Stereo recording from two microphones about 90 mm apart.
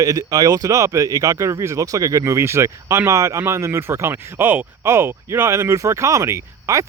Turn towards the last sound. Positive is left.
turn(degrees=-35)  # may be behind; listen again after turning